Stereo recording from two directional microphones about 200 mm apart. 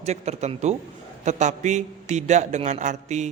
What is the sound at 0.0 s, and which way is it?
A man's voice, 35° right (ahead or behind).